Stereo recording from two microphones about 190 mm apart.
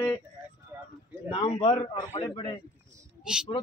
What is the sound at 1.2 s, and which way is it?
A man's voice, 30° left (ahead or behind).